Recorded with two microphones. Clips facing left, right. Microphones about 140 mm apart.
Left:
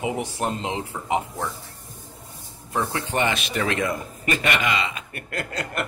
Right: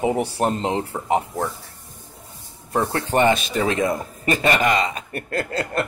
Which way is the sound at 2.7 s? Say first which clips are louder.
Right 5 dB; 35° right (ahead or behind).